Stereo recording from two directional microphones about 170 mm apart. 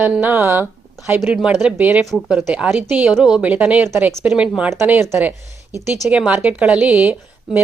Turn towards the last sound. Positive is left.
turn(degrees=-10)  # may be behind; listen again after turning